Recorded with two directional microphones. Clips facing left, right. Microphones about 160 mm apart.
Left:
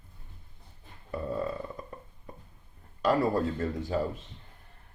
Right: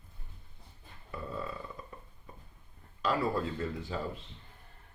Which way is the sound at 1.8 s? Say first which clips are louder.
Left 5 dB; 45° left (ahead or behind).